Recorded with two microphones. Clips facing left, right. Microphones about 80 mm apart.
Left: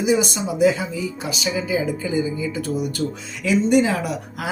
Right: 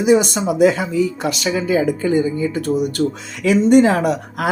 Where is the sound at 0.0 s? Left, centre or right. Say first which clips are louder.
Right 5 dB; right.